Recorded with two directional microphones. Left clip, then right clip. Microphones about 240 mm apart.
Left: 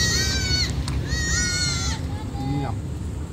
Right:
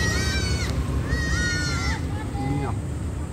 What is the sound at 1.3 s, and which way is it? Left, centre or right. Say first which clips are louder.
Sheep: left 3 dB; left.